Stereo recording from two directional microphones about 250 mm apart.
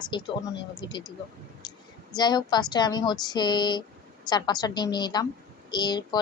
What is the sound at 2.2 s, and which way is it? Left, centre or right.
Speech, centre.